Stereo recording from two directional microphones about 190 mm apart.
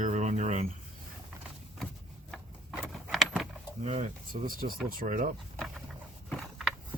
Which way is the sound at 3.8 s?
35° right (ahead or behind).